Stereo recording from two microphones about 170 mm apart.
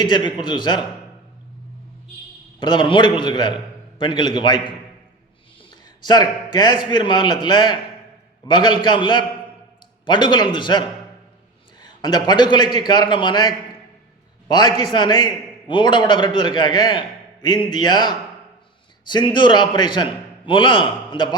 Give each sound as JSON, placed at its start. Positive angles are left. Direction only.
{"t": 0.0, "sound": "a man's voice", "side_deg": 25}
{"t": 2.6, "sound": "a man's voice", "side_deg": 25}
{"t": 6.1, "sound": "a man's voice", "side_deg": 25}
{"t": 12.0, "sound": "a man's voice", "side_deg": 25}